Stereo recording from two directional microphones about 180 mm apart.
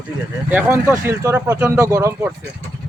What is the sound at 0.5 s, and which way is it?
Speech, 15° right (ahead or behind).